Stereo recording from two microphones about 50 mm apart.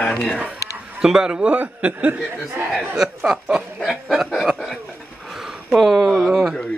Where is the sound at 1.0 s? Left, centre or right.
Centre.